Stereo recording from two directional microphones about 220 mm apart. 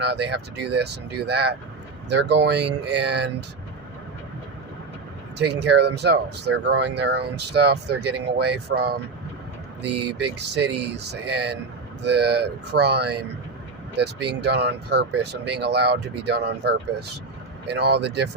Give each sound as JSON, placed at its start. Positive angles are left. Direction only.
{"t": 0.0, "sound": "speech", "side_deg": -50}
{"t": 5.4, "sound": "speech", "side_deg": -50}
{"t": 10.3, "sound": "speech", "side_deg": -50}